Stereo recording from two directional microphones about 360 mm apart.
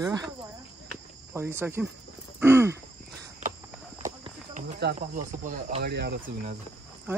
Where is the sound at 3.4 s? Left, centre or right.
Right.